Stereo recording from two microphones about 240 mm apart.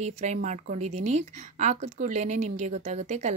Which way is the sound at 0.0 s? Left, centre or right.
Right.